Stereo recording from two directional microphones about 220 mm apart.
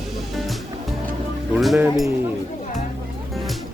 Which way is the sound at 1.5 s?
5° right (ahead or behind).